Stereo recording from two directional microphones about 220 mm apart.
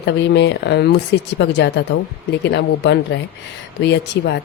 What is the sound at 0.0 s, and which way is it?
A woman's voice, 50° left (ahead or behind).